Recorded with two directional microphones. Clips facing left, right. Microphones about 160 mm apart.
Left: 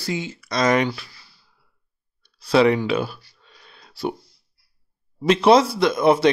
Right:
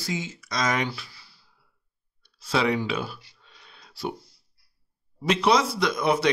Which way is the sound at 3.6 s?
45° left (ahead or behind).